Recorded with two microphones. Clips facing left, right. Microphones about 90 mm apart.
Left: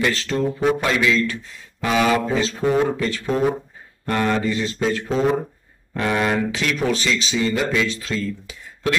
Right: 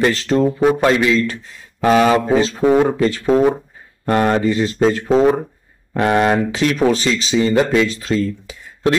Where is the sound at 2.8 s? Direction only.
40° right (ahead or behind).